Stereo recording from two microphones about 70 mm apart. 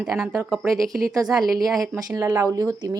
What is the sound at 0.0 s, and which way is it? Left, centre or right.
Speech, centre.